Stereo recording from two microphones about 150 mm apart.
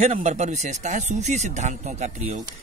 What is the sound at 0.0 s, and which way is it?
Speech, 50° right (ahead or behind).